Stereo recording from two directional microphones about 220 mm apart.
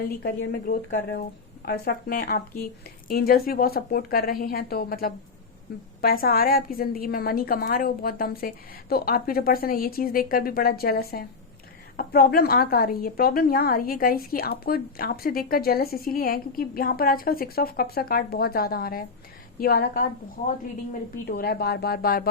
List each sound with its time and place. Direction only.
0.2 s a woman's voice: 45° left (ahead or behind)
21.2 s a woman's voice: 45° left (ahead or behind)